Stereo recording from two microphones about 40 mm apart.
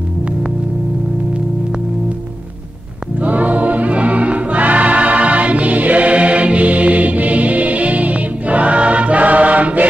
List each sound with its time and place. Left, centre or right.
3.2 s choir: right